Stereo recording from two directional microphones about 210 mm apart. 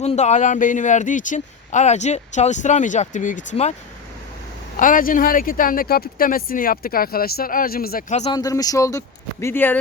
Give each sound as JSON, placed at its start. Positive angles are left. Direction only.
{"t": 0.0, "sound": "speech", "side_deg": 30}
{"t": 4.8, "sound": "speech", "side_deg": 40}
{"t": 8.2, "sound": "speech", "side_deg": 20}